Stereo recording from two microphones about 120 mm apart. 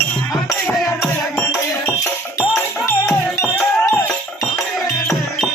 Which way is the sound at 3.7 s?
5° left (ahead or behind).